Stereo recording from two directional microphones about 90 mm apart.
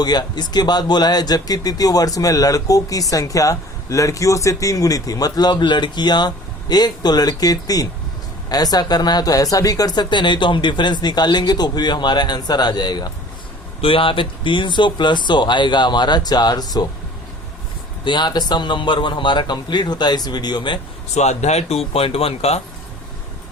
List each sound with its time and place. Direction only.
0.0 s speech: 50° left (ahead or behind)
13.8 s speech: 85° left; by 16.9 s 45° left (ahead or behind)
18.0 s speech: 55° left (ahead or behind)
21.8 s speech: 90° left